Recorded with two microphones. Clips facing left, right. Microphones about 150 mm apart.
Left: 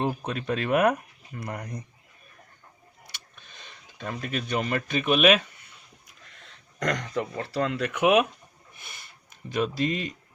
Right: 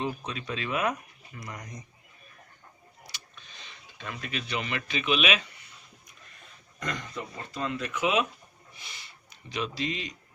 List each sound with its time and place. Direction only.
0.0 s speech: 55° left (ahead or behind)
3.1 s a sound: 50° left (ahead or behind)
6.4 s speech: 85° left; by 10.2 s 50° left (ahead or behind)